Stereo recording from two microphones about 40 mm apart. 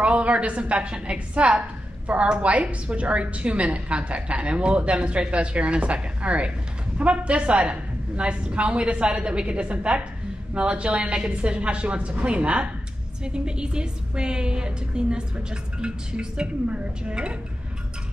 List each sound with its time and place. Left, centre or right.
0.0 s a woman's voice: right
2.5 s a woman's voice: right
16.6 s a woman's voice: right